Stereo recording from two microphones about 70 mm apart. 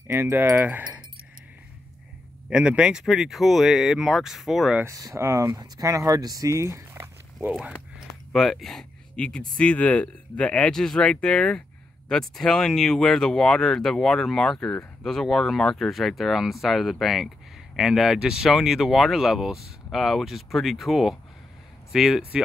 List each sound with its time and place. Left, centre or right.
0.1 s speech: right
2.5 s speech: centre
4.8 s speech: right
8.3 s speech: centre